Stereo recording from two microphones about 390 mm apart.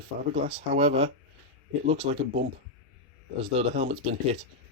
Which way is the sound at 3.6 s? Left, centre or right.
Centre.